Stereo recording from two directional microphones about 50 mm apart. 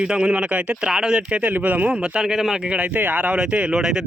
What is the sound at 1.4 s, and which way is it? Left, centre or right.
Speech, right.